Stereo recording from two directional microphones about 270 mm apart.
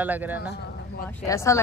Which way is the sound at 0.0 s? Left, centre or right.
Centre.